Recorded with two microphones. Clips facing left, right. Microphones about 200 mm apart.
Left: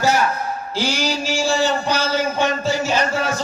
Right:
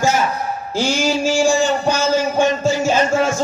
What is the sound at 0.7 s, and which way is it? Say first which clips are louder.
A man's voice: right 5 dB; 45° right (ahead or behind).